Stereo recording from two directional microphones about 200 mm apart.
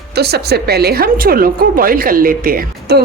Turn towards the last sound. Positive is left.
turn(degrees=-50)  # may be behind; listen again after turning